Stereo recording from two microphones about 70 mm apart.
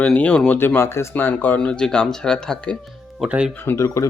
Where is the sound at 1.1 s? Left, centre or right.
Left; by 2.7 s centre.